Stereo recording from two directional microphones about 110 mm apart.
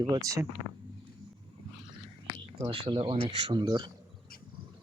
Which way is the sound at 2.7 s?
50° right (ahead or behind).